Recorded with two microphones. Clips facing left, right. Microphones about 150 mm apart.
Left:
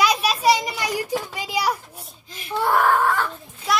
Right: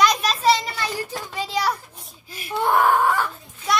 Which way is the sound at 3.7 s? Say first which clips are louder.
Even; centre (ahead or behind).